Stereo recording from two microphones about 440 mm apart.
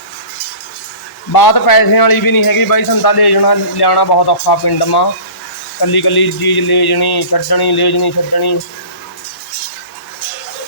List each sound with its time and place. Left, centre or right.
1.3 s a man's voice: left